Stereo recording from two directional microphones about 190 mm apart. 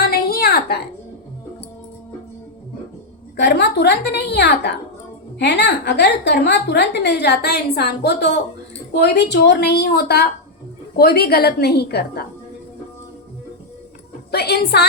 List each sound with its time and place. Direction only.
0.0 s a sound: 55° left (ahead or behind)
3.3 s a woman's voice: 65° left (ahead or behind)
14.3 s a woman's voice: 55° left (ahead or behind)